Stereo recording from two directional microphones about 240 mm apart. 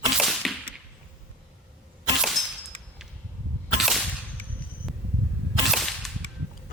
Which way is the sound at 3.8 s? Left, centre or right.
Centre.